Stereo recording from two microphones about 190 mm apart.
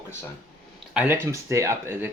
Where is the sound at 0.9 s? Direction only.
10° right (ahead or behind).